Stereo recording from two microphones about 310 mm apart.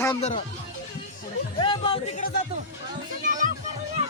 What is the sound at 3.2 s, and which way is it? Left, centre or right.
Music, right.